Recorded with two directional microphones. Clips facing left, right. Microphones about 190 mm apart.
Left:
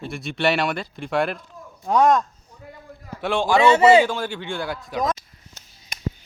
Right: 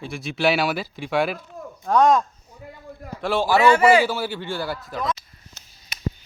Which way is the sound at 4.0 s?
5° right (ahead or behind).